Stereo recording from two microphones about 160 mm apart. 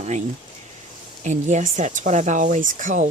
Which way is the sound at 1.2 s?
50° right (ahead or behind).